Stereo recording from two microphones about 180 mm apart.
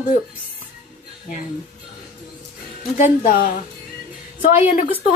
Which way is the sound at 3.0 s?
45° left (ahead or behind).